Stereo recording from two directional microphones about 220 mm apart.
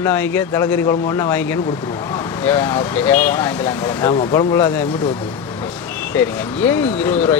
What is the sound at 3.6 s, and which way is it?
Speech, 20° left (ahead or behind).